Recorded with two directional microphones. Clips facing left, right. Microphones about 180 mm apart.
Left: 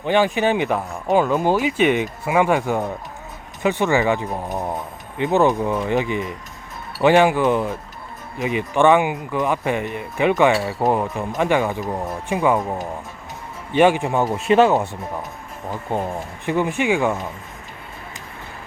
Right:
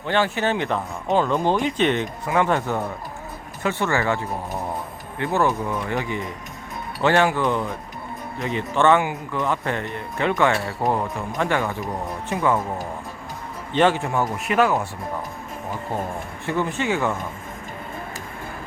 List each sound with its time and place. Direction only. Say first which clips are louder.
0.0 s speech: left 4 dB; 15° left (ahead or behind)
15.9 s speech: left 6 dB; 20° left (ahead or behind)